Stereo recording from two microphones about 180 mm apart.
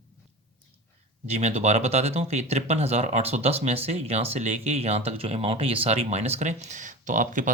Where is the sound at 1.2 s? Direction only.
35° right (ahead or behind).